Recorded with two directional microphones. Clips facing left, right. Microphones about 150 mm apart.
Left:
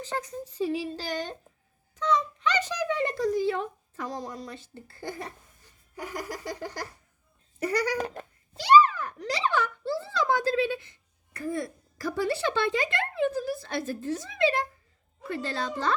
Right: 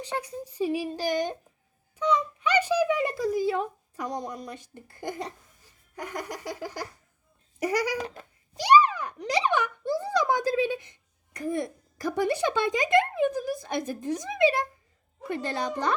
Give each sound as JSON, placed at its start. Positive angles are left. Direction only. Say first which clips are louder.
{"t": 0.0, "sound": "speech", "louder": "right 1 dB", "side_deg": -15}
{"t": 6.0, "sound": "a sound", "louder": "even", "side_deg": 0}
{"t": 7.6, "sound": "speech", "louder": "right 1 dB", "side_deg": -10}
{"t": 7.9, "sound": "speech", "louder": "left 2 dB", "side_deg": 45}
{"t": 8.5, "sound": "speech", "louder": "left 1 dB", "side_deg": -15}